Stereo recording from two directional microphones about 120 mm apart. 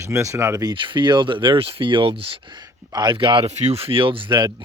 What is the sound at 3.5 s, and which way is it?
Speech, 65° right (ahead or behind).